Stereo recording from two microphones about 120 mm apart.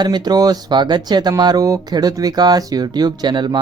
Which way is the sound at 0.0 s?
35° right (ahead or behind).